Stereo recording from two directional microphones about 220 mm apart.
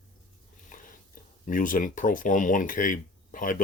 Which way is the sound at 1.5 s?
40° left (ahead or behind).